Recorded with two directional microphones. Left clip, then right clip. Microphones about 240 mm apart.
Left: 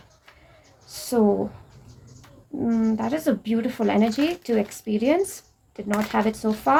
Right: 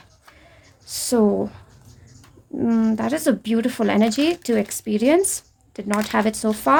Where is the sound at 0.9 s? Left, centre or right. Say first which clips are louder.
Right 3 dB; right.